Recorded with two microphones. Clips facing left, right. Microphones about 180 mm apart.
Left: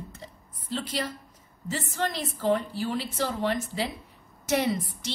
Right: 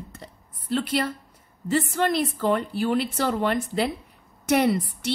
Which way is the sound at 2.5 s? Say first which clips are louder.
Right 5 dB; 65° right (ahead or behind).